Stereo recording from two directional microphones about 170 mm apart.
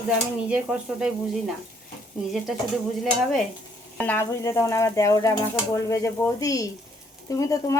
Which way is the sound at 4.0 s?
15° left (ahead or behind).